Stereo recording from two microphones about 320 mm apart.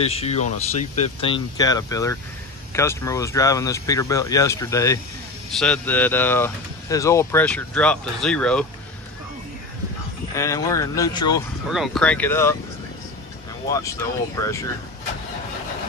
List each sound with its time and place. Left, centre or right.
0.0 s speech: centre
10.3 s speech: centre
11.7 s speech: centre
13.7 s speech: centre